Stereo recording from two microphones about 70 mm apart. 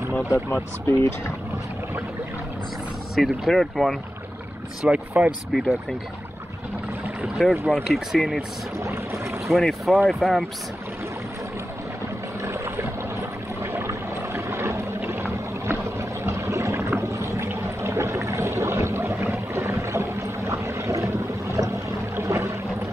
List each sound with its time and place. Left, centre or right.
0.3 s speech: left
3.2 s speech: centre
4.8 s speech: centre
5.5 s speech: centre
7.6 s speech: centre
8.8 s boat: right
9.5 s speech: centre
12.4 s boat: right
13.6 s vehicle: right
15.0 s a sound: right
19.3 s vehicle: right